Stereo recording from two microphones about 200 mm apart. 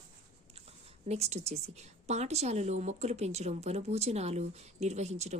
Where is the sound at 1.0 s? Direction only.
30° right (ahead or behind).